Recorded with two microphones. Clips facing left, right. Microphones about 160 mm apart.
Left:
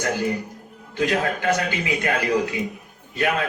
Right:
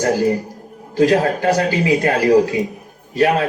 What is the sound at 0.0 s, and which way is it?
A man's voice, 35° right (ahead or behind).